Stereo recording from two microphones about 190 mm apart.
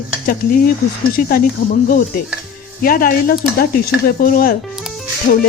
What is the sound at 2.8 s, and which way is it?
Speech, 50° left (ahead or behind).